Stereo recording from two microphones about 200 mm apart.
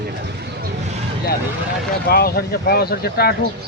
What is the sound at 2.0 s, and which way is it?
Speech, 50° left (ahead or behind).